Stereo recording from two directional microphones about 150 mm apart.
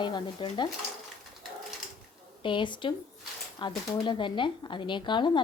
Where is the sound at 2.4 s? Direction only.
30° left (ahead or behind).